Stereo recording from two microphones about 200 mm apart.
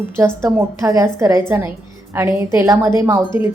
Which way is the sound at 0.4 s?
15° right (ahead or behind).